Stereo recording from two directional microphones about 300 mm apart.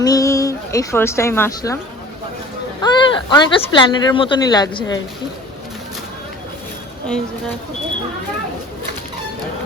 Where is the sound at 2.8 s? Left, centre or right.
Centre.